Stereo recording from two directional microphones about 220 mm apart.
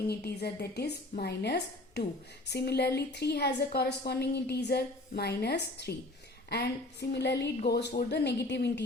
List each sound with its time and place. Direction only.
0.1 s a woman's voice: 45° left (ahead or behind)
7.1 s a woman's voice: 50° left (ahead or behind)